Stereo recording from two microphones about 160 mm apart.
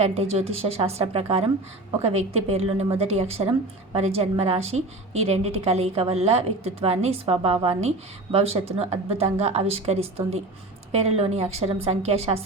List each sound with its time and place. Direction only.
0.0 s a woman's voice: 40° right (ahead or behind)